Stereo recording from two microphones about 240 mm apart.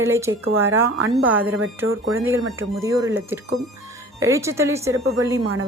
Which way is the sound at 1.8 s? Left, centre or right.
Right.